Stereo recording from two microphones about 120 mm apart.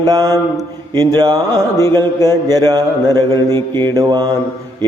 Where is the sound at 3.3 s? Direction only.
25° left (ahead or behind).